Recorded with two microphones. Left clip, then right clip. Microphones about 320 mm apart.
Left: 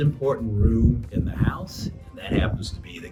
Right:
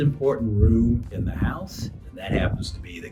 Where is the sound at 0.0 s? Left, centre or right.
Centre.